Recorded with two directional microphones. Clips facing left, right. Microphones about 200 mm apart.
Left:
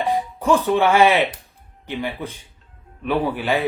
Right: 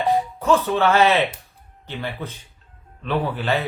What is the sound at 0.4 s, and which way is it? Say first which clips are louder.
Speech: left 2 dB; 15° left (ahead or behind).